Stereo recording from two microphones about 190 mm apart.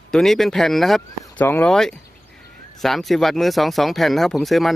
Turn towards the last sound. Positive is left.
turn(degrees=0)  # may be behind; listen again after turning